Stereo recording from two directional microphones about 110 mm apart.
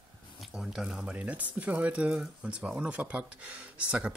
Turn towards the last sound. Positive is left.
turn(degrees=-10)  # may be behind; listen again after turning